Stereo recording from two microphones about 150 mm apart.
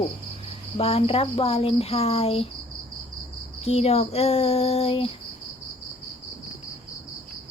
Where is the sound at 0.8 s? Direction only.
40° left (ahead or behind).